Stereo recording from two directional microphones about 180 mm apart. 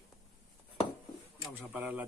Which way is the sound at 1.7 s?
10° right (ahead or behind).